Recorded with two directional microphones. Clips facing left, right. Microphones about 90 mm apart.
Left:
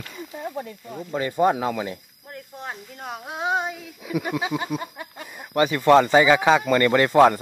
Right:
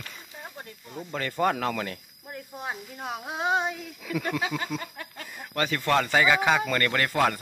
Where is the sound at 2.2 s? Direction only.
5° right (ahead or behind).